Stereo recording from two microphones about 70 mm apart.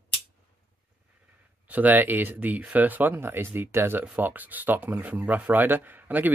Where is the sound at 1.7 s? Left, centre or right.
Right.